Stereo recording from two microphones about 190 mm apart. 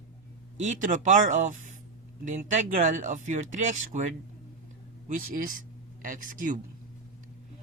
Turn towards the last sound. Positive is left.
turn(degrees=-45)  # may be behind; listen again after turning